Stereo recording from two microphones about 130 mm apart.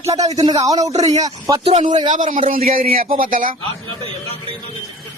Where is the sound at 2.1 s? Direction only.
75° right (ahead or behind).